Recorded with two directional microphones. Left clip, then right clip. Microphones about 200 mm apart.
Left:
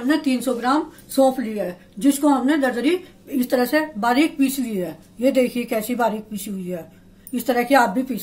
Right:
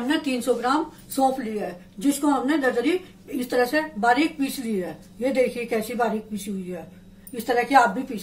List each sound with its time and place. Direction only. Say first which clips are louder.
0.1 s speech: left 2 dB; 40° left (ahead or behind)